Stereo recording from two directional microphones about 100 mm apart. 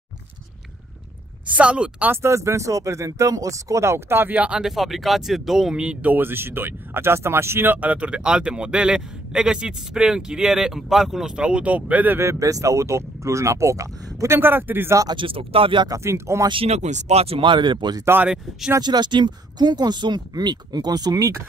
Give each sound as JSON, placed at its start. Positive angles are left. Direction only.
{"t": 1.5, "sound": "speech", "side_deg": -10}
{"t": 2.2, "sound": "speech", "side_deg": -30}
{"t": 15.1, "sound": "speech", "side_deg": -65}
{"t": 15.9, "sound": "speech", "side_deg": -30}
{"t": 16.6, "sound": "speech", "side_deg": -90}
{"t": 18.0, "sound": "speech", "side_deg": -20}
{"t": 18.8, "sound": "speech", "side_deg": -45}